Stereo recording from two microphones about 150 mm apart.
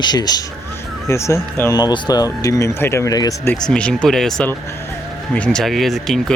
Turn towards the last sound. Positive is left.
turn(degrees=0)  # may be behind; listen again after turning